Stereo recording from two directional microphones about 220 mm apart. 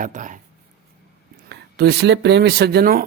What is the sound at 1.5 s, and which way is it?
Speech, 50° right (ahead or behind).